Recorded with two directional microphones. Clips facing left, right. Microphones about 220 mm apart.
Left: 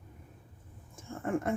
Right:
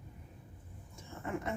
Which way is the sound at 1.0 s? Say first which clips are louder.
Left 7 dB; 50° left (ahead or behind).